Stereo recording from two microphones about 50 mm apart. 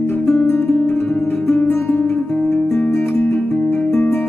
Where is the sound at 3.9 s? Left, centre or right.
Left.